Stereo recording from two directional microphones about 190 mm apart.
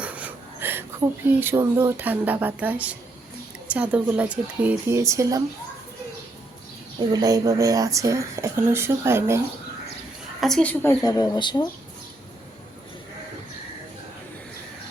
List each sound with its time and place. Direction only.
0.0 s speech: 5° right (ahead or behind)
7.0 s speech: 20° right (ahead or behind)
10.4 s a woman's voice: 5° left (ahead or behind)
11.0 s speech: 20° left (ahead or behind)